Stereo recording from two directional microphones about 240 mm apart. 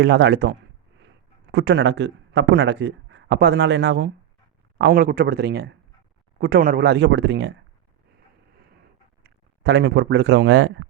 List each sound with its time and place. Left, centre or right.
0.0 s a man's voice: right
9.2 s speech: right